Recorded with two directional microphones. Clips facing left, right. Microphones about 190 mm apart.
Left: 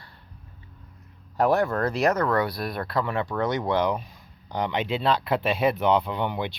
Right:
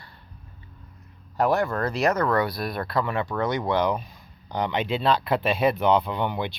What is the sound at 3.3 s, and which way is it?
Speech, 40° left (ahead or behind).